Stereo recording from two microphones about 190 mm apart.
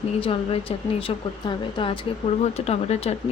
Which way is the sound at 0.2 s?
30° left (ahead or behind).